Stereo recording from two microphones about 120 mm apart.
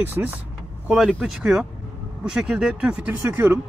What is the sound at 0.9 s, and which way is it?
Speech, centre (ahead or behind).